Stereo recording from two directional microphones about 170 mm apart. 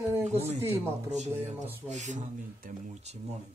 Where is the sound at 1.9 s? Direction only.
45° right (ahead or behind).